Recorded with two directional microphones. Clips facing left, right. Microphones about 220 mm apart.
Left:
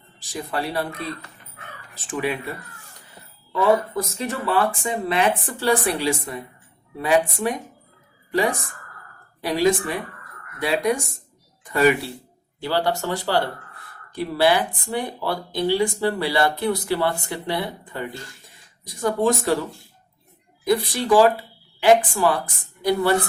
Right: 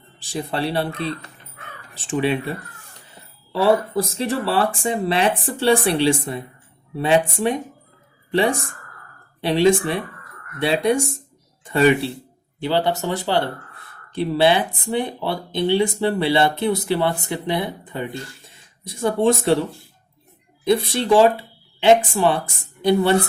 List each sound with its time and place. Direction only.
0.2 s speech: 30° right (ahead or behind)
3.5 s speech: 30° right (ahead or behind)
20.7 s speech: 25° right (ahead or behind)